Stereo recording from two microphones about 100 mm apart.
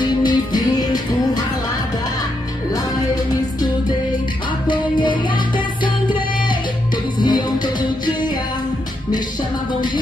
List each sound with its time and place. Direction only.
0.0 s music: 45° left (ahead or behind)
4.6 s music: 50° left (ahead or behind)
7.2 s music: 50° left (ahead or behind)